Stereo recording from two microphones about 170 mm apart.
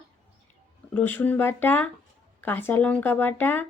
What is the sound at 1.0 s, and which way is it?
A woman's voice, 10° left (ahead or behind).